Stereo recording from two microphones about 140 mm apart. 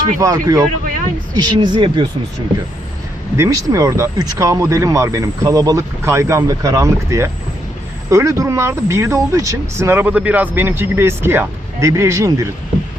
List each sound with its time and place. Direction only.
0.2 s speech: 25° right (ahead or behind)
3.3 s speech: 20° right (ahead or behind)